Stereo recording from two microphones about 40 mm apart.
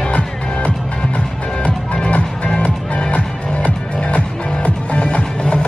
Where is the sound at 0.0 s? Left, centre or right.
Left.